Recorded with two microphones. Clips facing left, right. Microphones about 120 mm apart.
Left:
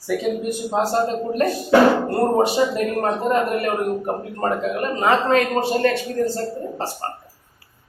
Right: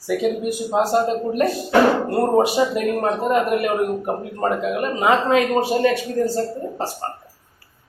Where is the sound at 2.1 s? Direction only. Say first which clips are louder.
Right 1 dB; 5° right (ahead or behind).